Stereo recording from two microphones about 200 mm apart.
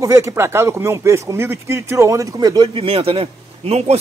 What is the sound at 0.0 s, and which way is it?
Speech, 15° right (ahead or behind).